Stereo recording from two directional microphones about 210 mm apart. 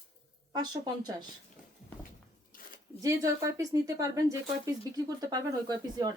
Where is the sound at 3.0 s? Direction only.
15° right (ahead or behind).